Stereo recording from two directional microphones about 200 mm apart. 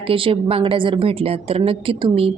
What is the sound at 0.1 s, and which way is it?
A woman's voice, 25° right (ahead or behind).